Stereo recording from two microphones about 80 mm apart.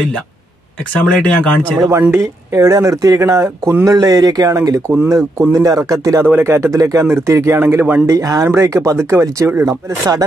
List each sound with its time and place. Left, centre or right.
1.0 s speech: centre
1.9 s speech: right
3.8 s speech: right
6.2 s speech: right
7.6 s speech: right
8.1 s speech: right